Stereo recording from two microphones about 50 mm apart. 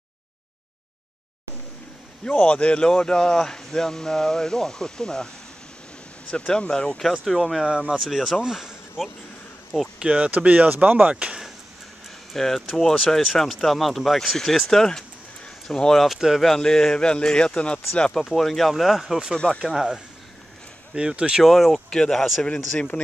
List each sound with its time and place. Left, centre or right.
2.3 s speech: left
6.3 s speech: centre
9.9 s speech: right
10.3 s speech: right
11.1 s speech: right
12.3 s speech: centre; by 18.1 s left
18.3 s speech: centre
19.3 s speech: centre
19.6 s speech: centre
20.9 s speech: centre
21.5 s speech: centre
21.9 s speech: centre